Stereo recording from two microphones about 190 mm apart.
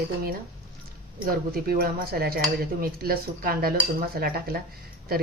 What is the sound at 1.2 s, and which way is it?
Speech, 50° right (ahead or behind).